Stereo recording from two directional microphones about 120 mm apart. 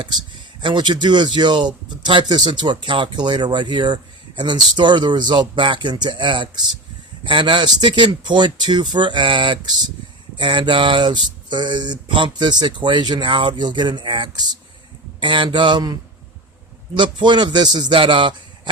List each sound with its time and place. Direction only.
0.6 s speech: 40° right (ahead or behind)